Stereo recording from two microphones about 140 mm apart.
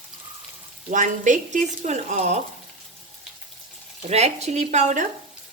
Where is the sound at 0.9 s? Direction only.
65° right (ahead or behind).